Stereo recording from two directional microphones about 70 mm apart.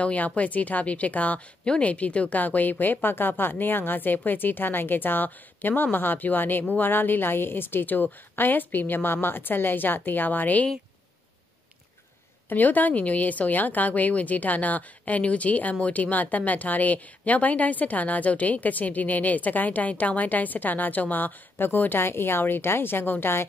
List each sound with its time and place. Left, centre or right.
0.0 s speech: centre
12.4 s speech: left